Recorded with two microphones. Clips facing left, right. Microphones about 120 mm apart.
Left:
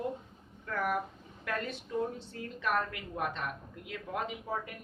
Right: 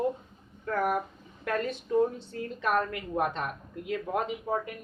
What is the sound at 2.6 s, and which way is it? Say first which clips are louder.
A woman's voice: right 4 dB; 40° right (ahead or behind).